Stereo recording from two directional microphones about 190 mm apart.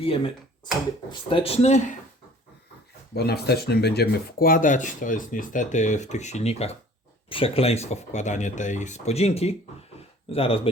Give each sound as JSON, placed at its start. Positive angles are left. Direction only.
{"t": 0.0, "sound": "speech", "side_deg": 30}
{"t": 1.3, "sound": "speech", "side_deg": 30}
{"t": 3.2, "sound": "speech", "side_deg": 60}